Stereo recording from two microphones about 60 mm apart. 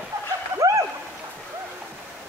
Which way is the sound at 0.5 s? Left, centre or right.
Right.